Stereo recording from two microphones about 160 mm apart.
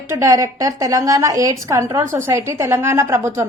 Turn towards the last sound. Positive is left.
turn(degrees=-15)  # may be behind; listen again after turning